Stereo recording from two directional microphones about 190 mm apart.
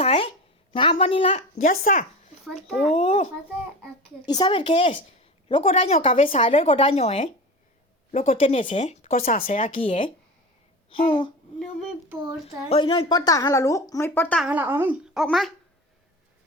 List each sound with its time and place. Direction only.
0.0 s a sound: 30° left (ahead or behind)
0.7 s speech: 25° left (ahead or behind)
1.6 s speech: 45° left (ahead or behind)
2.6 s speech: 5° left (ahead or behind)
2.9 s speech: 30° left (ahead or behind)
4.3 s speech: 25° left (ahead or behind); by 9.7 s 45° left (ahead or behind)
9.7 s speech: 25° left (ahead or behind)
12.6 s speech: 30° left (ahead or behind); by 14.4 s 10° left (ahead or behind)
14.4 s speech: 10° right (ahead or behind)